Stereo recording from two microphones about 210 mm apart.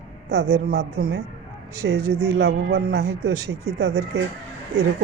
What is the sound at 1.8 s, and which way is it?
Speech, 60° right (ahead or behind).